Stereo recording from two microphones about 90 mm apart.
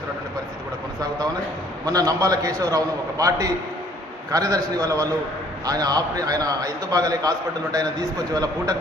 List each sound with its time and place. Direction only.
1.8 s a man's voice: 45° right (ahead or behind)